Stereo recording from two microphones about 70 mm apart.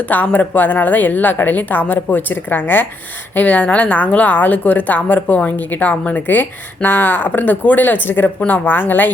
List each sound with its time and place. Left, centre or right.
0.1 s a woman's voice: left